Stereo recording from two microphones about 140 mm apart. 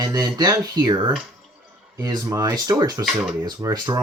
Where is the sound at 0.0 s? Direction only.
25° right (ahead or behind).